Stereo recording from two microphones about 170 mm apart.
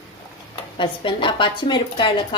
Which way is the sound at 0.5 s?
30° left (ahead or behind).